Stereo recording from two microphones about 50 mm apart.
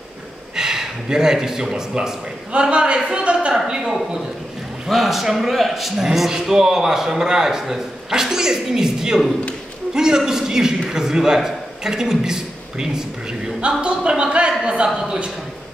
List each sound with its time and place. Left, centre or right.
0.6 s a man's voice: centre
4.8 s a man's voice: centre; by 14.9 s right